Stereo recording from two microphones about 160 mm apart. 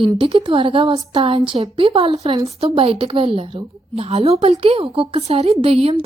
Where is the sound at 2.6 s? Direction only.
35° right (ahead or behind).